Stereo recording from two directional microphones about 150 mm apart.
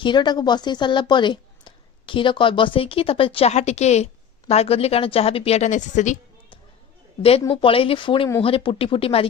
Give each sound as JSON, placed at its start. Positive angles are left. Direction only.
{"t": 0.0, "sound": "speech", "side_deg": 30}
{"t": 7.2, "sound": "speech", "side_deg": 40}